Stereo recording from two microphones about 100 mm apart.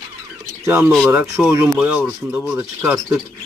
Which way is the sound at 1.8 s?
15° right (ahead or behind).